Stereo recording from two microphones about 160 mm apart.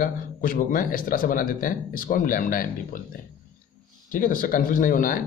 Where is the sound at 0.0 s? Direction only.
60° left (ahead or behind).